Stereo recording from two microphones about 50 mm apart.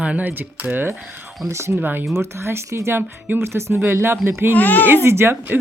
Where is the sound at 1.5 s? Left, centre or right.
Right.